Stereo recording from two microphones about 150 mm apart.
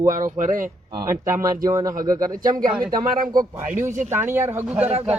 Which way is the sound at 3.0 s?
65° right (ahead or behind).